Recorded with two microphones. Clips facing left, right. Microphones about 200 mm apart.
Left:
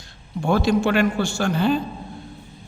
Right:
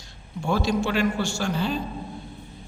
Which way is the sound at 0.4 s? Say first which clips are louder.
Left 5 dB; 60° left (ahead or behind).